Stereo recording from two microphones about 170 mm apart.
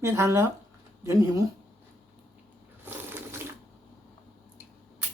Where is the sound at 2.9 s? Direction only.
15° right (ahead or behind).